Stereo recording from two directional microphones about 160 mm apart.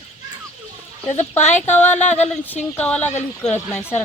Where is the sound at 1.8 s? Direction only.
10° left (ahead or behind).